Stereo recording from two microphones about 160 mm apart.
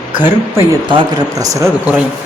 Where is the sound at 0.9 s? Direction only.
25° right (ahead or behind).